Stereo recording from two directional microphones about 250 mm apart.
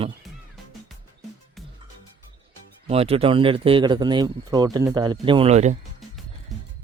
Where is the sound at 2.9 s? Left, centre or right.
Right.